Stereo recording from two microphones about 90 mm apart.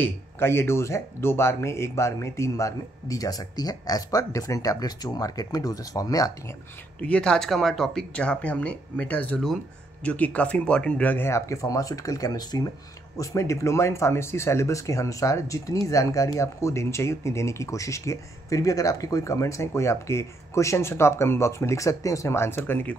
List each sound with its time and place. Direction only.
0.0 s speech: 25° left (ahead or behind)
7.0 s speech: 10° left (ahead or behind)
11.2 s speech: 35° left (ahead or behind)
13.2 s speech: 35° left (ahead or behind)